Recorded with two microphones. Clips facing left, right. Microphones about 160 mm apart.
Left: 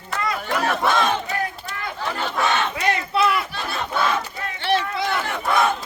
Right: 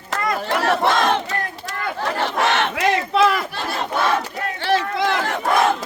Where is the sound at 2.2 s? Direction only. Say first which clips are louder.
Right 2 dB; 85° right.